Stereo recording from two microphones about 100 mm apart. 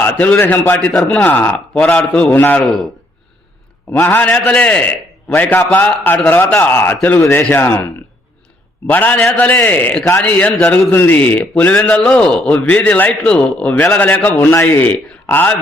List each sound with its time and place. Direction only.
0.0 s a man's voice: 20° left (ahead or behind)
0.9 s a man's voice: 5° left (ahead or behind)
1.2 s a man's voice: 15° left (ahead or behind)
2.6 s a man's voice: centre (ahead or behind)
4.1 s a man's voice: 15° left (ahead or behind)
7.2 s a man's voice: 30° left (ahead or behind)
8.9 s a man's voice: 15° left (ahead or behind)